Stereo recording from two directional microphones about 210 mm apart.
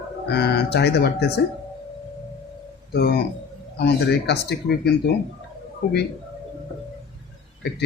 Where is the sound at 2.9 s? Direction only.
50° left (ahead or behind).